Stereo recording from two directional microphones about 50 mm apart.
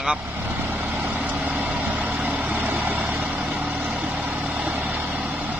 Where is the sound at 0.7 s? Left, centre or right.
Right.